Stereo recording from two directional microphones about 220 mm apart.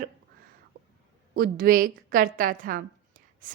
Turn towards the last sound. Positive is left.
turn(degrees=-40)  # may be behind; listen again after turning